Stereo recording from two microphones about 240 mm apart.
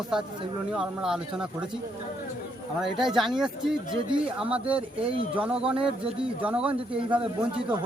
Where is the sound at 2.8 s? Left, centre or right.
Centre.